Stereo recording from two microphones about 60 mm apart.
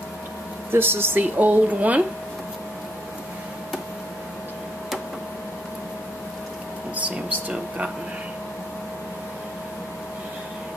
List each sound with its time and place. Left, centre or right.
0.7 s speech: right
7.1 s a sound: right
7.5 s speech: right